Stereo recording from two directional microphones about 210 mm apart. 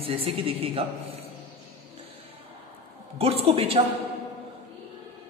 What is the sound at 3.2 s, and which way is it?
Speech, 30° right (ahead or behind).